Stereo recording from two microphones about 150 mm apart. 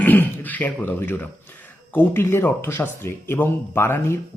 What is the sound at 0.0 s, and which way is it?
Speech, 10° left (ahead or behind).